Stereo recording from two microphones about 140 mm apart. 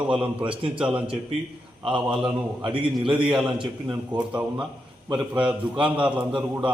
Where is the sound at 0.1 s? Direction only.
10° right (ahead or behind).